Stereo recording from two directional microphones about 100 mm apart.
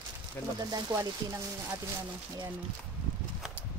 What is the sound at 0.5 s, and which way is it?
Speech, 40° right (ahead or behind).